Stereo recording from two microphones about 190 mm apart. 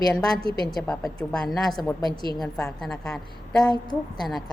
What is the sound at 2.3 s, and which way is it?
A woman's voice, 5° left (ahead or behind).